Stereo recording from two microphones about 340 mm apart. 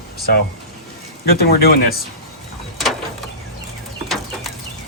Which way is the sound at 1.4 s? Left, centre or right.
Left.